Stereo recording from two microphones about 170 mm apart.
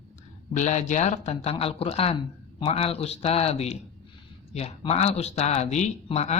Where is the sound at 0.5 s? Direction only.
45° left (ahead or behind).